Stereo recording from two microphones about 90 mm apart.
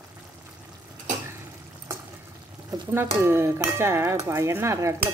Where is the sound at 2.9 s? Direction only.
25° right (ahead or behind).